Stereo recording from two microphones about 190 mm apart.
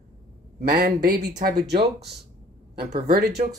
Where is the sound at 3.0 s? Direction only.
55° right (ahead or behind).